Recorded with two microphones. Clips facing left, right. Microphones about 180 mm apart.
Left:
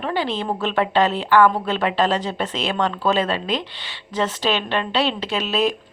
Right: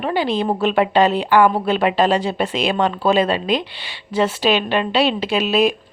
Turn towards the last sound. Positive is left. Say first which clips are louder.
# right 4 dB
turn(degrees=-10)  # may be behind; listen again after turning